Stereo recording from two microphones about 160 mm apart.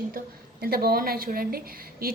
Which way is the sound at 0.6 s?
70° right (ahead or behind).